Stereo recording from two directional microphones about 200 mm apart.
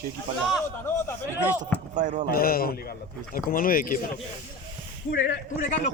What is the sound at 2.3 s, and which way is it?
A man's voice, 45° left (ahead or behind).